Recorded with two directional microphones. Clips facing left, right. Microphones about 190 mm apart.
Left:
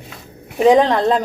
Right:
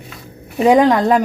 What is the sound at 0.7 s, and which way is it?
Speech, 10° right (ahead or behind).